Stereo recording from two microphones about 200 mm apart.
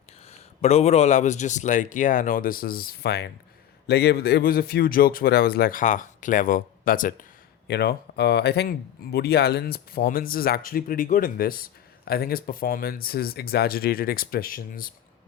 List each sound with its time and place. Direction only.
0.3 s a man's voice: 30° left (ahead or behind)
7.7 s speech: 55° left (ahead or behind)